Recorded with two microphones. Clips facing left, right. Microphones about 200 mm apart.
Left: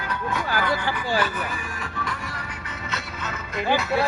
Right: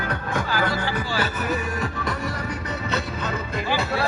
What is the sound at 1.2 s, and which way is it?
Speech, 40° right (ahead or behind).